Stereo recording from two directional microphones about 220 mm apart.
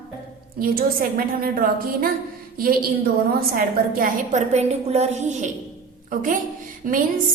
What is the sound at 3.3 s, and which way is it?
A woman's voice, 40° right (ahead or behind).